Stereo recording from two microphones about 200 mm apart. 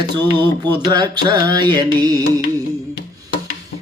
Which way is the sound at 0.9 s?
20° right (ahead or behind).